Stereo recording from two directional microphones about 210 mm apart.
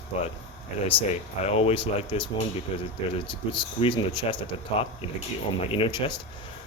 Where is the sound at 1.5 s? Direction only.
30° left (ahead or behind).